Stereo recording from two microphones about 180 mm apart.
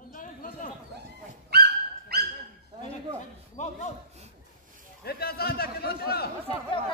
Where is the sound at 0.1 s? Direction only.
50° left (ahead or behind).